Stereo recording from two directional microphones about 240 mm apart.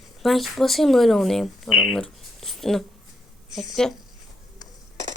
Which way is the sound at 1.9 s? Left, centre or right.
Centre.